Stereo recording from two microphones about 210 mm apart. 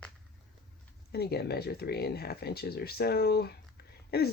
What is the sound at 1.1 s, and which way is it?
Speech, 50° left (ahead or behind).